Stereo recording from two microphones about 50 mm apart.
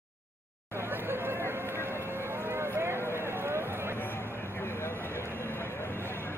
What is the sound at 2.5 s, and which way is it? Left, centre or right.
Run, right.